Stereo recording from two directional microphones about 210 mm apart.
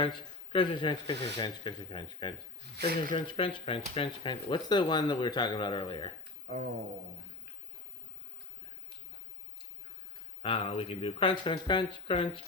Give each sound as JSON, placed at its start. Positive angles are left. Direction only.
{"t": 0.0, "sound": "speech", "side_deg": 25}
{"t": 10.4, "sound": "speech", "side_deg": 25}